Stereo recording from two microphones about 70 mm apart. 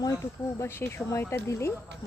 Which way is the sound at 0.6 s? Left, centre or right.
Left.